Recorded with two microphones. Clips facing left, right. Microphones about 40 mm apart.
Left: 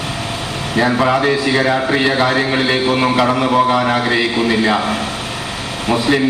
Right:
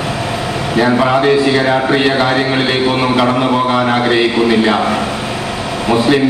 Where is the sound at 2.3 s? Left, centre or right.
Right.